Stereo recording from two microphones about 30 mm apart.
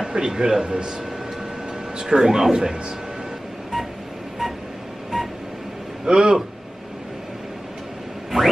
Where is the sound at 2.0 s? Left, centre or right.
Centre.